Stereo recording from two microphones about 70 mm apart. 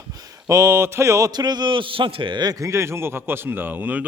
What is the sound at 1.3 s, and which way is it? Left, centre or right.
Speech, right.